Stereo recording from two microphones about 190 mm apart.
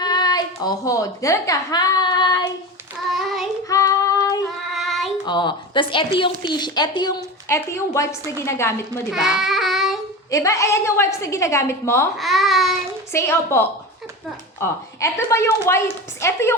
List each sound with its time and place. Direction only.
0.0 s a woman's voice: 20° left (ahead or behind)
3.1 s child singing: centre (ahead or behind)
3.7 s child singing: 20° left (ahead or behind)
4.7 s child singing: centre (ahead or behind)
5.2 s a woman's voice: 25° left (ahead or behind)
9.1 s child singing: centre (ahead or behind)
10.3 s a woman's voice: 15° left (ahead or behind)
12.1 s a child's voice: centre (ahead or behind)
13.1 s a woman's voice: 15° left (ahead or behind)